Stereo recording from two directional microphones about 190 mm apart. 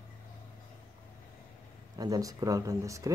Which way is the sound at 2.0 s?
20° right (ahead or behind).